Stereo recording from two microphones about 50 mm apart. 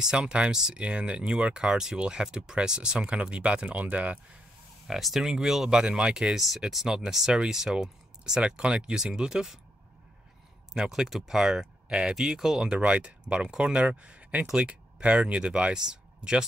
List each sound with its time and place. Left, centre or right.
0.0 s speech: centre
4.8 s speech: centre
10.7 s speech: centre
12.8 s speech: right